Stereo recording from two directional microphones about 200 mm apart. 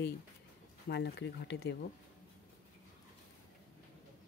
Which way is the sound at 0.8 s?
55° left (ahead or behind).